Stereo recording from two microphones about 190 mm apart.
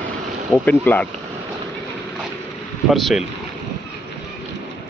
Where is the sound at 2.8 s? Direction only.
Centre (ahead or behind).